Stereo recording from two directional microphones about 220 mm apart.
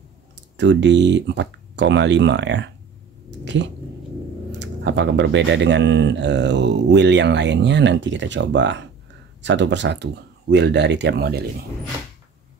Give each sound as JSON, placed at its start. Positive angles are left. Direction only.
{"t": 0.6, "sound": "speech", "side_deg": -55}
{"t": 3.3, "sound": "cat", "side_deg": -55}
{"t": 4.5, "sound": "speech", "side_deg": -50}